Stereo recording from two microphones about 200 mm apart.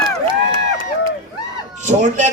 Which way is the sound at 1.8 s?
35° right (ahead or behind).